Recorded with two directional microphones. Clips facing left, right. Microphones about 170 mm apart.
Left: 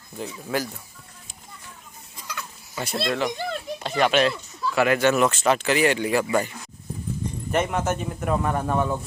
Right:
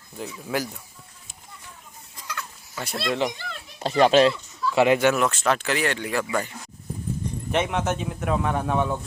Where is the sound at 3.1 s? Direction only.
15° right (ahead or behind).